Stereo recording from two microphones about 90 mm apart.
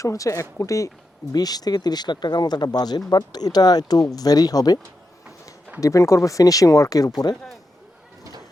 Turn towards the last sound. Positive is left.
turn(degrees=40)  # may be behind; listen again after turning